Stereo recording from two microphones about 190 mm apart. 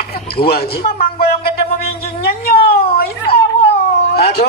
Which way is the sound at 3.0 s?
55° left (ahead or behind).